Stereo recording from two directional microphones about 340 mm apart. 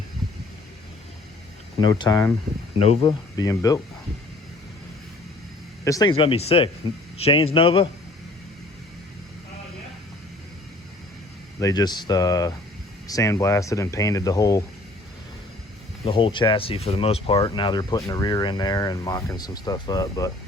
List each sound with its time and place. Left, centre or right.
1.8 s speech: centre
5.8 s speech: centre
11.6 s speech: centre
16.0 s speech: centre